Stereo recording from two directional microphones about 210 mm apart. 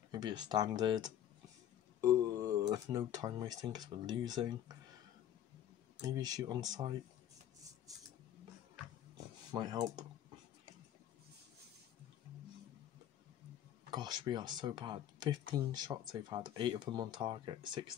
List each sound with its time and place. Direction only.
0.1 s speech: 20° right (ahead or behind)
5.9 s speech: 20° right (ahead or behind)
9.5 s speech: 20° right (ahead or behind)
13.8 s speech: 20° right (ahead or behind)